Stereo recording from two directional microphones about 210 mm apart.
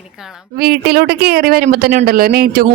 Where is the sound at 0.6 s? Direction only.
50° right (ahead or behind).